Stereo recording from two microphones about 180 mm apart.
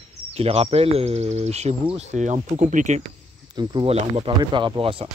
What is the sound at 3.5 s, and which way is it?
Speech, 25° right (ahead or behind).